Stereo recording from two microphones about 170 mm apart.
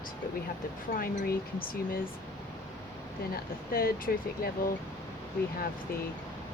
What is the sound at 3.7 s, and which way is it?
Speech, 60° left (ahead or behind).